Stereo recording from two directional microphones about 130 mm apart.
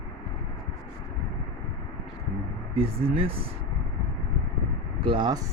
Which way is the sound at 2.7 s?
45° right (ahead or behind).